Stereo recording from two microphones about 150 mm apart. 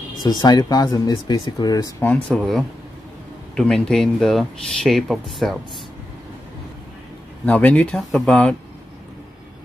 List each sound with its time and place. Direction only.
0.2 s speech: 25° left (ahead or behind)
2.3 s speech: centre (ahead or behind)
7.4 s speech: 10° left (ahead or behind)